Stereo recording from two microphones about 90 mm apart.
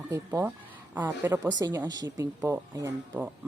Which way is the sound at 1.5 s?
45° right (ahead or behind).